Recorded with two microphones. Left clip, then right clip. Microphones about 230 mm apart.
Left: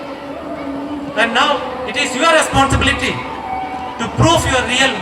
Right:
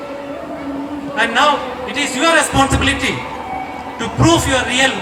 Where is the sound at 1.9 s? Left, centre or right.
Left.